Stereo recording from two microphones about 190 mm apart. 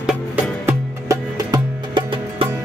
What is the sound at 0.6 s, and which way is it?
Music, 20° right (ahead or behind).